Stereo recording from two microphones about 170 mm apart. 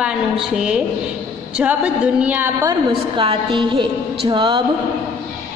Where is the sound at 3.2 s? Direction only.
30° right (ahead or behind).